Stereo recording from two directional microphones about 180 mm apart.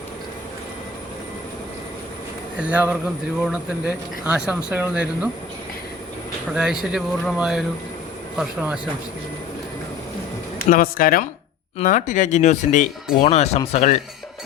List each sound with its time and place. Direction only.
2.6 s speech: 5° right (ahead or behind)
6.5 s speech: 5° right (ahead or behind)
10.6 s speech: 50° left (ahead or behind)